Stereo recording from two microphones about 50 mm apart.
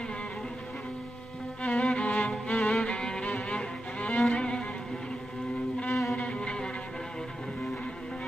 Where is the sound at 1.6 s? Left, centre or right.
Left.